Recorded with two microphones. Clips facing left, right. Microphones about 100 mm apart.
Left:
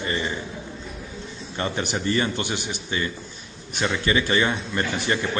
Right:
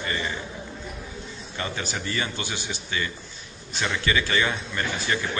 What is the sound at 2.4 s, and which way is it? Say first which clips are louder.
Speech: left 4 dB; 55° left (ahead or behind).